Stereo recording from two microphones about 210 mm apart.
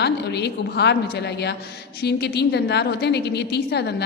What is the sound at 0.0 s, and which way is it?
A woman's voice, 50° left (ahead or behind).